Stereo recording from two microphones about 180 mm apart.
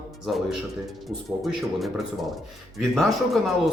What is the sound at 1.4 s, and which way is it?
A man's voice, centre (ahead or behind).